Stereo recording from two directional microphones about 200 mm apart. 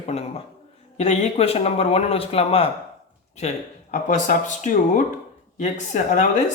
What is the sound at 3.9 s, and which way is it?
Speech, 40° left (ahead or behind).